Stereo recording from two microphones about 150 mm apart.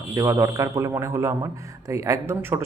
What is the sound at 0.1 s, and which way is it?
Speech, 20° right (ahead or behind).